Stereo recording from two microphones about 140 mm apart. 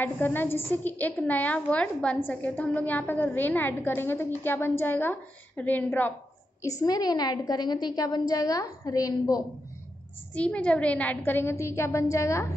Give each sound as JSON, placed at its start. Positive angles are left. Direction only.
{"t": 0.0, "sound": "a woman's voice", "side_deg": 15}
{"t": 6.6, "sound": "a woman's voice", "side_deg": 25}
{"t": 10.3, "sound": "a woman's voice", "side_deg": 10}